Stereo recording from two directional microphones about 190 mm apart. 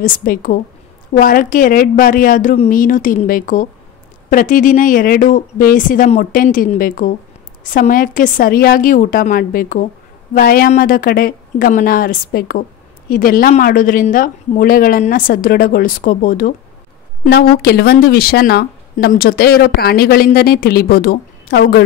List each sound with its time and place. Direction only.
0.0 s a woman's voice: 50° left (ahead or behind)